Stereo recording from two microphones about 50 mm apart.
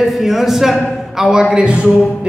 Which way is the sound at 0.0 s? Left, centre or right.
Centre.